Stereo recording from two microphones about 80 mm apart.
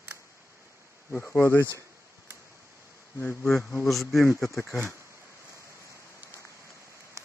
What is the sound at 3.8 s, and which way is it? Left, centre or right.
Speech, centre.